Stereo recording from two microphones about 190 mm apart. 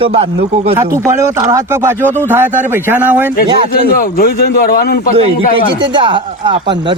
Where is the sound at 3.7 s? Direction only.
50° left (ahead or behind).